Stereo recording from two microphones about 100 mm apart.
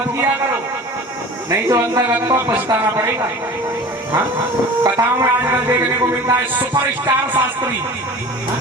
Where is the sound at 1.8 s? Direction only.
25° right (ahead or behind).